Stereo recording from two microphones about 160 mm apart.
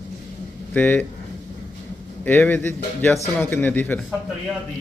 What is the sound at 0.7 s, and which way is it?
Speech, 10° left (ahead or behind).